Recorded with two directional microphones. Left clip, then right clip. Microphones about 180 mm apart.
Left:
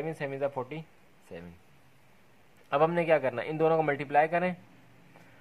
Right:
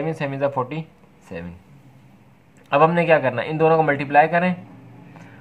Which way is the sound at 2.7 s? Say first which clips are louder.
Right 9 dB; 45° left (ahead or behind).